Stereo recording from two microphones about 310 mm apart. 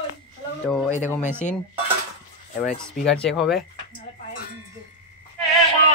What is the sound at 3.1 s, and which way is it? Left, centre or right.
Speech, centre.